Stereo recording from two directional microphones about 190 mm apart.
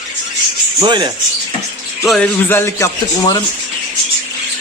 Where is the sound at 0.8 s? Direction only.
20° right (ahead or behind).